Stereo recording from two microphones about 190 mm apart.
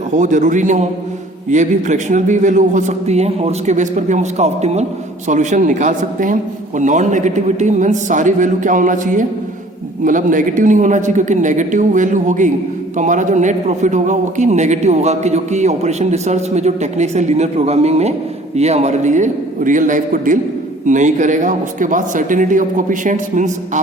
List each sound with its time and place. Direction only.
0.1 s a man's voice: 40° right (ahead or behind)